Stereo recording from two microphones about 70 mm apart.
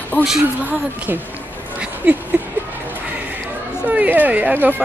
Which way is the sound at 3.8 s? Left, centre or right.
Right.